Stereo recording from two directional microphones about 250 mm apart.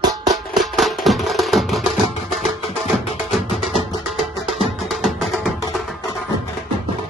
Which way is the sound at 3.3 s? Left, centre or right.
Centre.